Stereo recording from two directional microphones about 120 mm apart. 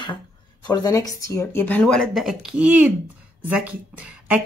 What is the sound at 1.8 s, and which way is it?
A woman's voice, 5° left (ahead or behind).